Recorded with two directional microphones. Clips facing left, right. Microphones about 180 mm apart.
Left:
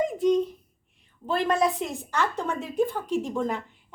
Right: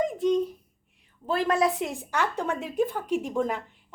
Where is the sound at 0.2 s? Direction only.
Centre (ahead or behind).